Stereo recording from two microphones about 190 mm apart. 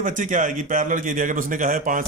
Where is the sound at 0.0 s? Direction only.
40° right (ahead or behind).